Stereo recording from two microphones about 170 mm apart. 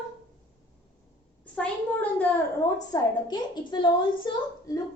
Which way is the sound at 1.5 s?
10° left (ahead or behind).